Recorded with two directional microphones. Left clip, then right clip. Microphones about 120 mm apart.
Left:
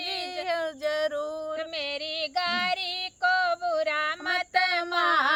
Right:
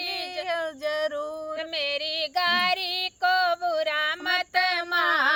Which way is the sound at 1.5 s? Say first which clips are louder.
Right 3 dB; 45° right (ahead or behind).